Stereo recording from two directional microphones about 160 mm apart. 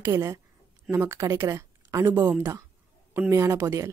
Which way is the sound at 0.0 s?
20° right (ahead or behind).